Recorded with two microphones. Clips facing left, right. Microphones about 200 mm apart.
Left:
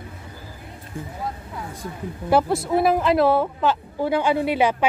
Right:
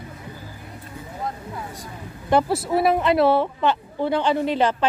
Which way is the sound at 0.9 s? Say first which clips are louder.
Left 7 dB; 50° left (ahead or behind).